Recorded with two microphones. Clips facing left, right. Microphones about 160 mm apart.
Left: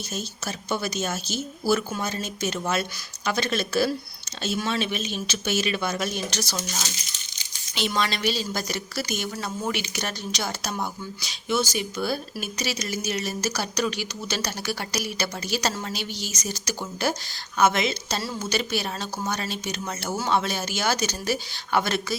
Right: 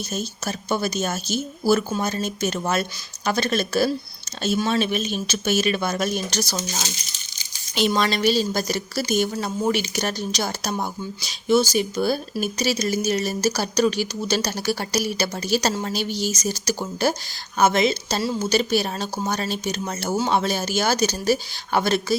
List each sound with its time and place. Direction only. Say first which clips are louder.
0.1 s speech: right 3 dB; 45° right (ahead or behind)